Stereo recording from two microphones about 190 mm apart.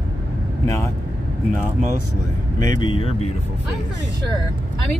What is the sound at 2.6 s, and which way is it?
Speech, 25° left (ahead or behind).